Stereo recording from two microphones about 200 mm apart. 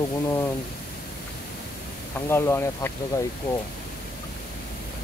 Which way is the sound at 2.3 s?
10° left (ahead or behind).